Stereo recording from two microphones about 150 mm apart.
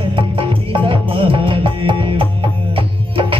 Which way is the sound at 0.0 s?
35° right (ahead or behind).